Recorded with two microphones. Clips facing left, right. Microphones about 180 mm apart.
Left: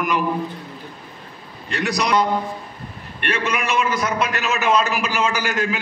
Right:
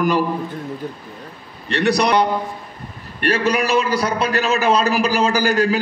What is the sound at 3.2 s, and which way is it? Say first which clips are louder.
A man's voice: right 6 dB; 35° right (ahead or behind).